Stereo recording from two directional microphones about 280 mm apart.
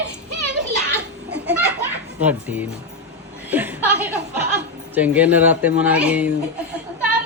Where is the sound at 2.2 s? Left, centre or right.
Centre.